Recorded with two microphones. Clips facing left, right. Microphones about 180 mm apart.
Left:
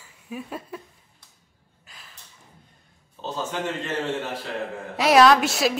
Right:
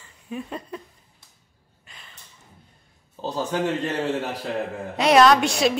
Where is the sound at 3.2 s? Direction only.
35° right (ahead or behind).